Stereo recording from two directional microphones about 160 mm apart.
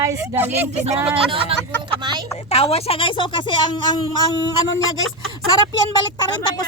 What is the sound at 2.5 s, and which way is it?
A woman's voice, 40° left (ahead or behind).